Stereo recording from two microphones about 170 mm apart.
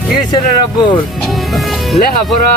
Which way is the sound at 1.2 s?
Centre (ahead or behind).